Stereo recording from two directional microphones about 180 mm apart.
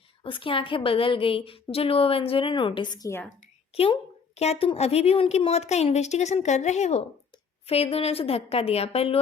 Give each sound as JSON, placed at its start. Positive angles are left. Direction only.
{"t": 0.2, "sound": "a woman's voice", "side_deg": 30}
{"t": 4.4, "sound": "a woman's voice", "side_deg": 35}